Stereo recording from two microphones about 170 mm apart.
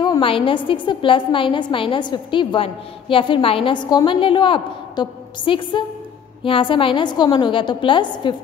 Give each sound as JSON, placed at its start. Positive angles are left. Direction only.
{"t": 0.0, "sound": "a woman's voice", "side_deg": 30}